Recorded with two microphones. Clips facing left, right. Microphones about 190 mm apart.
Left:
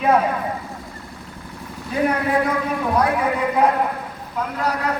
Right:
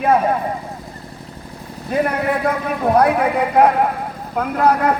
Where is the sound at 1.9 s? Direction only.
60° right (ahead or behind).